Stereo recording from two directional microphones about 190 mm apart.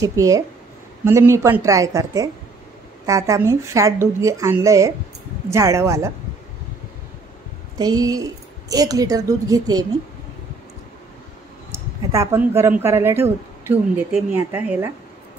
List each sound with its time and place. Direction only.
0.0 s a woman's voice: 15° right (ahead or behind)
7.7 s a woman's voice: 20° right (ahead or behind)
11.7 s a woman's voice: 15° right (ahead or behind)